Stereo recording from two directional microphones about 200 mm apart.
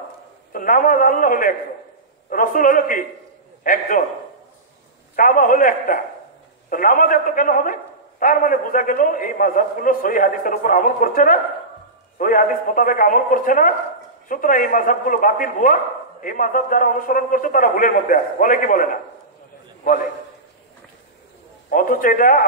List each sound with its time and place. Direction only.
0.5 s a man's voice: 45° left (ahead or behind)
5.1 s a man's voice: 45° left (ahead or behind)
21.6 s a man's voice: 40° left (ahead or behind)